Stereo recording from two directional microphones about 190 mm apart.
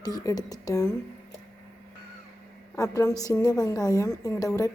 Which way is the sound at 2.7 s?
15° left (ahead or behind).